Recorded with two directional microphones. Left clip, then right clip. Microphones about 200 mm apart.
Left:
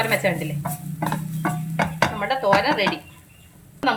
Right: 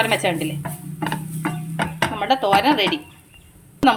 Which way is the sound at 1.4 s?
5° right (ahead or behind).